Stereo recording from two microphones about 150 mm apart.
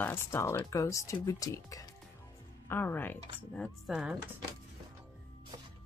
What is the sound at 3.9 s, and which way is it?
Speech, 5° right (ahead or behind).